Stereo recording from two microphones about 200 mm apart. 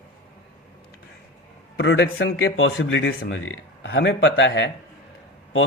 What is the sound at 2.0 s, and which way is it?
Speech, 55° left (ahead or behind).